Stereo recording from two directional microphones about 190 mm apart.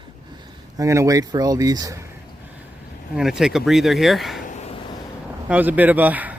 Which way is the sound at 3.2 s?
Centre (ahead or behind).